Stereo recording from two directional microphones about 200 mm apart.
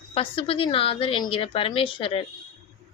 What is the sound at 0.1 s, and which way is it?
A woman's voice, 25° left (ahead or behind).